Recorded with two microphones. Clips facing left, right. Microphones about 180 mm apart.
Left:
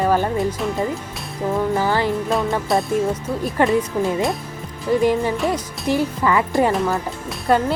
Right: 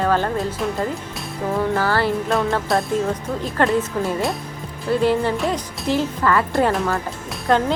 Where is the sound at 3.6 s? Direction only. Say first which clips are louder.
Left 1 dB; 15° left (ahead or behind).